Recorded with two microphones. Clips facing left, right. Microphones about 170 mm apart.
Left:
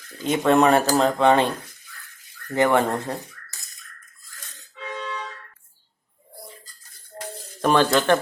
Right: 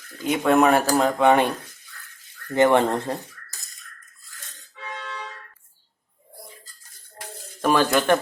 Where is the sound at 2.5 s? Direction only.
20° right (ahead or behind).